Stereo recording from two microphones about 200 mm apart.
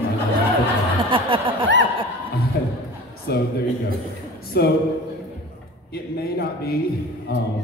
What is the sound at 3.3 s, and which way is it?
Speech, 55° left (ahead or behind).